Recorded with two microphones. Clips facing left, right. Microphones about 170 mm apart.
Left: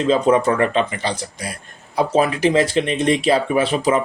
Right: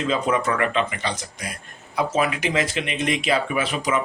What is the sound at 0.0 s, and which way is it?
Speech, 35° left (ahead or behind).